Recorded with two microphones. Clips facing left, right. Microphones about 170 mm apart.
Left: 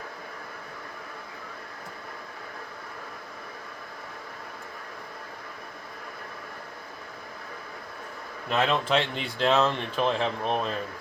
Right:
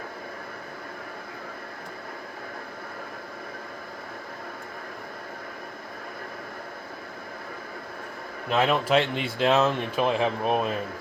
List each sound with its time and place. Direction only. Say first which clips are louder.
8.4 s speech: right 2 dB; 10° right (ahead or behind)